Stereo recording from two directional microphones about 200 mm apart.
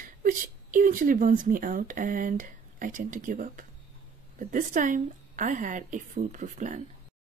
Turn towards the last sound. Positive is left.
turn(degrees=-40)  # may be behind; listen again after turning